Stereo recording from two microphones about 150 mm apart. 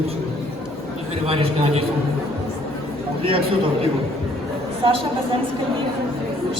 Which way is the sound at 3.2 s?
35° right (ahead or behind).